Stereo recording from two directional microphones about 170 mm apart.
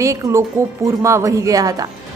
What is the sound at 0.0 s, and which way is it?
A woman's voice, 20° right (ahead or behind).